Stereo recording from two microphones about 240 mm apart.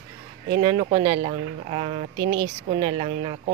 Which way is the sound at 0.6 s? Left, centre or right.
Right.